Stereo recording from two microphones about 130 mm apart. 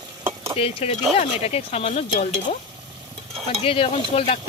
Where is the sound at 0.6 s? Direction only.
50° left (ahead or behind).